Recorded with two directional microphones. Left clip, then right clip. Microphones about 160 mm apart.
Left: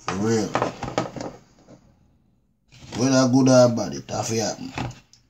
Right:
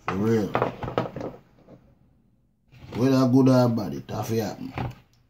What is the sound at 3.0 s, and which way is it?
Speech, 5° left (ahead or behind).